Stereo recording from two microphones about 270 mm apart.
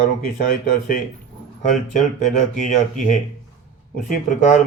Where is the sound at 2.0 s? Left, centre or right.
Left.